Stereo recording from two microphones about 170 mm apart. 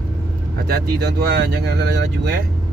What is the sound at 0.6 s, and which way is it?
Speech, 70° right (ahead or behind).